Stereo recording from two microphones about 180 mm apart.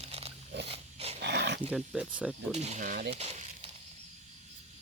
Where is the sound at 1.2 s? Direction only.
70° right (ahead or behind).